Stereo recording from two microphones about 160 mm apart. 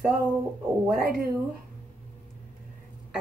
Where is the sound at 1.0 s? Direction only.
70° right (ahead or behind).